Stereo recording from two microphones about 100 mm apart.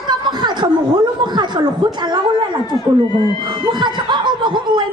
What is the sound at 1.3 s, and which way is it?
Speech, 45° right (ahead or behind).